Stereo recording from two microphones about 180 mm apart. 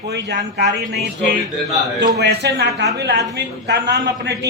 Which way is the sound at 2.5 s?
70° right (ahead or behind).